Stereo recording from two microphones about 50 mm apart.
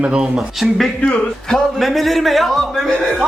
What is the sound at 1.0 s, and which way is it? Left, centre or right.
Speech, centre.